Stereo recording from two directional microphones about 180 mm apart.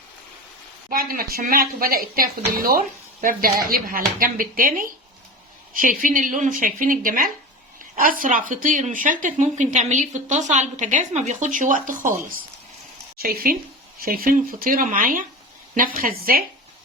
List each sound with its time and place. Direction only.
0.9 s a woman's voice: 55° right (ahead or behind)
13.1 s a woman's voice: 55° right (ahead or behind)